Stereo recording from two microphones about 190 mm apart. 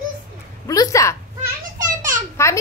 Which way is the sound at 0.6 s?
15° left (ahead or behind).